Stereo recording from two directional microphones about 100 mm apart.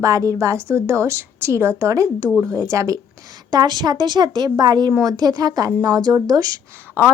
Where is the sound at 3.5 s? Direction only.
45° right (ahead or behind).